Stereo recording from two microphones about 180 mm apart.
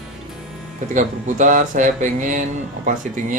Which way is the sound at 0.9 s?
45° right (ahead or behind).